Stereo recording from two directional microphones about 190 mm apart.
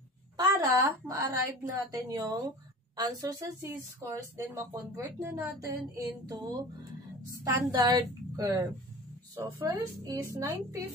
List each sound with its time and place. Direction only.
0.4 s a woman's voice: 20° right (ahead or behind)
6.0 s music: 20° right (ahead or behind)
7.4 s a woman's voice: 20° right (ahead or behind)